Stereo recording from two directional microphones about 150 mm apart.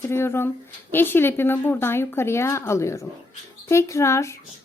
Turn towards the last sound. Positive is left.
turn(degrees=20)  # may be behind; listen again after turning